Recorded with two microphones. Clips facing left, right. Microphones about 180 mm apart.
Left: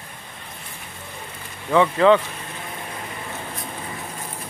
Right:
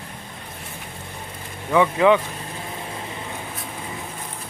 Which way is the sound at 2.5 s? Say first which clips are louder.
Right 1 dB; 25° right (ahead or behind).